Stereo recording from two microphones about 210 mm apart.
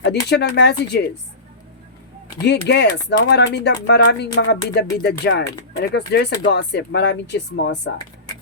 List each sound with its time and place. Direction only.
0.0 s speech: 55° left (ahead or behind)
2.4 s speech: 55° left (ahead or behind)